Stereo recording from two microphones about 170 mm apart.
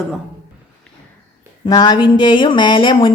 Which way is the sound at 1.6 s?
25° left (ahead or behind).